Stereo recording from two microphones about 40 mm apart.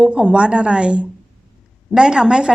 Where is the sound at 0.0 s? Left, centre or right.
Right.